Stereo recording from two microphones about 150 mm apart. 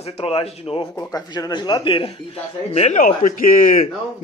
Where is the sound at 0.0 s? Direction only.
40° left (ahead or behind).